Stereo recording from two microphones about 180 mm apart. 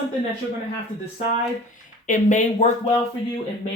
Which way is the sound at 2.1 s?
45° left (ahead or behind).